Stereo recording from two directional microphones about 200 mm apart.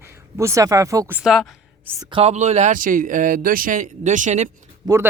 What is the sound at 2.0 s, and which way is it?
Speech, 25° right (ahead or behind).